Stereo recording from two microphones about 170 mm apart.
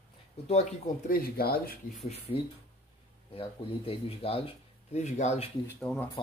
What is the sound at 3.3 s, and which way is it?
Speech, 35° left (ahead or behind).